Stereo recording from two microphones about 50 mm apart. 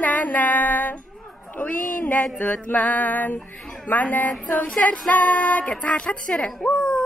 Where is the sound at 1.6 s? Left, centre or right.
Left.